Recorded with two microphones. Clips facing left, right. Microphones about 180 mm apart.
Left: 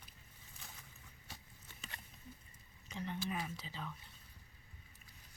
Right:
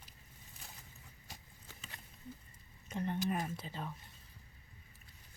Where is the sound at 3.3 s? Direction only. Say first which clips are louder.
Right 5 dB; 50° right (ahead or behind).